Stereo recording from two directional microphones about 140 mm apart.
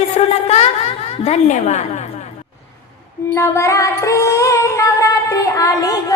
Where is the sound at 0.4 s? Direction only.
45° left (ahead or behind).